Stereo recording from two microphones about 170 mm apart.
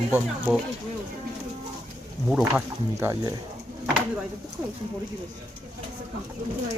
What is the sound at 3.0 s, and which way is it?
Speech, 15° right (ahead or behind).